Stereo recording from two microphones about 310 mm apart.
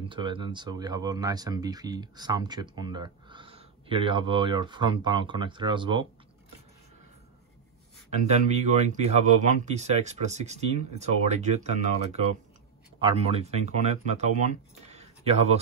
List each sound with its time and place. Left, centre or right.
0.1 s speech: centre
8.3 s speech: right
14.9 s a sound: right